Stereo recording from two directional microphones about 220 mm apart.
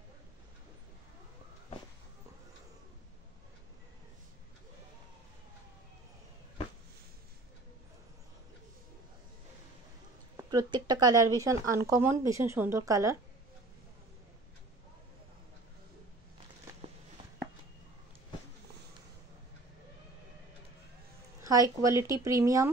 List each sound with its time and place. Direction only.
10.3 s a woman's voice: 20° right (ahead or behind)
21.4 s speech: 15° right (ahead or behind)